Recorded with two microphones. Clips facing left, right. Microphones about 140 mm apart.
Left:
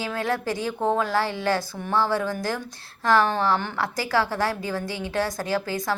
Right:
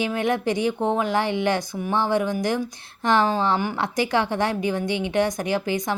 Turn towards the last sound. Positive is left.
turn(degrees=-20)  # may be behind; listen again after turning